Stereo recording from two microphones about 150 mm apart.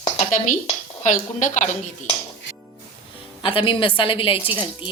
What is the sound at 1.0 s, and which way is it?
A woman's voice, 55° left (ahead or behind).